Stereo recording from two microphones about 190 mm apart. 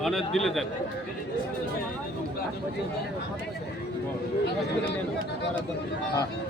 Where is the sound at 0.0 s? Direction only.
Centre (ahead or behind).